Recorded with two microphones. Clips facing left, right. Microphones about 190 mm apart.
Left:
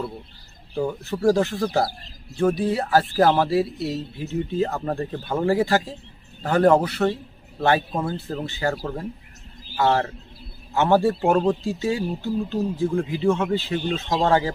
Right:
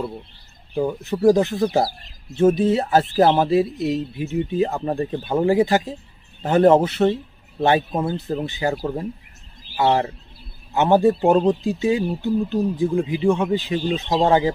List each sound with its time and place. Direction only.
0.7 s speech: 15° right (ahead or behind)